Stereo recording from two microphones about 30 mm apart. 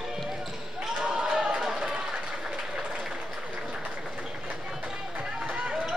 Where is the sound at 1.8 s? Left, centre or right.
Right.